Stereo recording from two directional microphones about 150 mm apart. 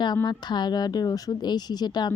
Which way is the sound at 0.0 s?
30° left (ahead or behind).